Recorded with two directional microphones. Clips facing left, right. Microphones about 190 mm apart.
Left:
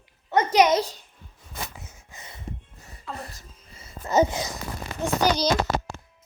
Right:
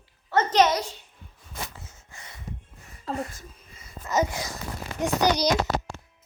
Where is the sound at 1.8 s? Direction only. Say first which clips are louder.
Left 2 dB; 20° left (ahead or behind).